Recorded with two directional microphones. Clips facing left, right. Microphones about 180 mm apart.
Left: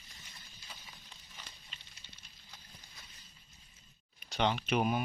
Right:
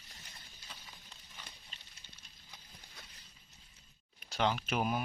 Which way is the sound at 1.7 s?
40° right (ahead or behind).